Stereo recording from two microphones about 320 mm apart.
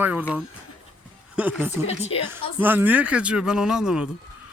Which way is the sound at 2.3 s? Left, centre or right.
Centre.